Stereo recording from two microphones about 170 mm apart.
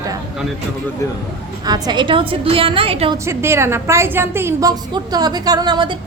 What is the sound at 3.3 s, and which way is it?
A woman's voice, 15° right (ahead or behind).